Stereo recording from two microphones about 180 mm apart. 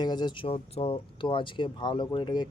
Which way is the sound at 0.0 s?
25° left (ahead or behind).